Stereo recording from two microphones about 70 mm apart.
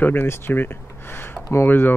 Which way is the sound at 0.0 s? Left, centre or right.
Left.